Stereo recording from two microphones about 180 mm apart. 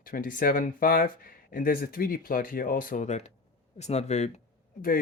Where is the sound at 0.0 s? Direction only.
50° left (ahead or behind).